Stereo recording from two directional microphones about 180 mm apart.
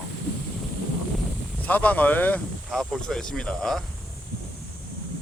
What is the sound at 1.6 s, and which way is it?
Speech, 10° left (ahead or behind).